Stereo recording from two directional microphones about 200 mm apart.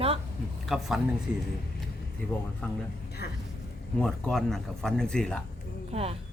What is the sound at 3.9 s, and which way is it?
Speech, 5° left (ahead or behind).